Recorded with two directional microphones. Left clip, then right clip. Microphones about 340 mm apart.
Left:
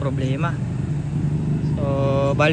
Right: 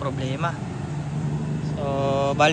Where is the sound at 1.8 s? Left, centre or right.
Centre.